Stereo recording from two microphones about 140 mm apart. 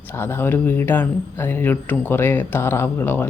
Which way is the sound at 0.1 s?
15° left (ahead or behind).